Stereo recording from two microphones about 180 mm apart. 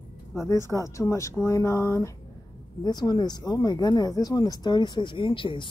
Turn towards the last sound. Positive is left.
turn(degrees=30)  # may be behind; listen again after turning